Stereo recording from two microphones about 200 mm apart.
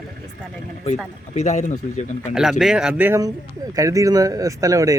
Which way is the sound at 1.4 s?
35° left (ahead or behind).